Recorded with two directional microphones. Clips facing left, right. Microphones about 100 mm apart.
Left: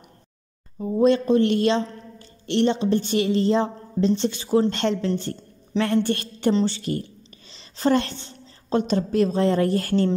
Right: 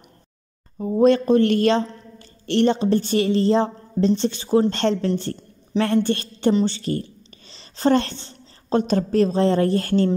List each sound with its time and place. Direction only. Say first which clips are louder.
0.7 s a woman's voice: right 2 dB; 50° right (ahead or behind); by 10.0 s 30° right (ahead or behind)